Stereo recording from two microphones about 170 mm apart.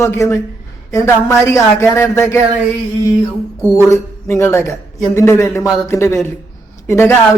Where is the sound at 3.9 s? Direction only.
15° left (ahead or behind).